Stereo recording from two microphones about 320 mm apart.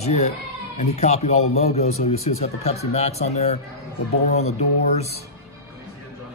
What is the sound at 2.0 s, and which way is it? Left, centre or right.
Speech, centre.